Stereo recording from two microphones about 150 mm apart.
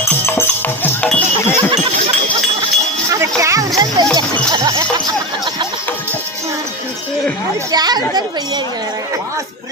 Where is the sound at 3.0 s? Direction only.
20° right (ahead or behind).